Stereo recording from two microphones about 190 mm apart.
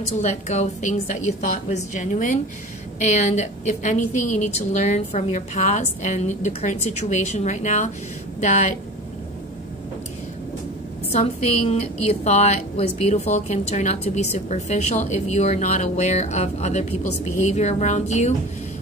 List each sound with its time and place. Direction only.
0.2 s a woman's voice: 40° left (ahead or behind)
1.7 s a woman's voice: 40° left (ahead or behind)
11.1 s a woman's voice: 35° left (ahead or behind)